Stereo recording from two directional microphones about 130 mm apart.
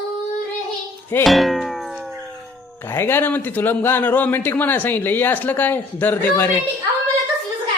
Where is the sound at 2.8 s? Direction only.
20° left (ahead or behind).